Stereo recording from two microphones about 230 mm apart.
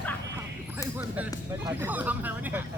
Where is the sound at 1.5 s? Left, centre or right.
Centre.